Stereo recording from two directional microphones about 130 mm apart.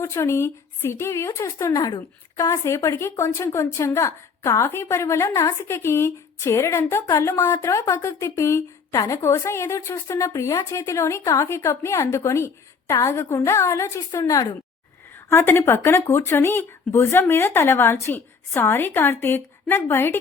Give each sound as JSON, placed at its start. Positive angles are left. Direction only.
{"t": 0.0, "sound": "speech", "side_deg": 20}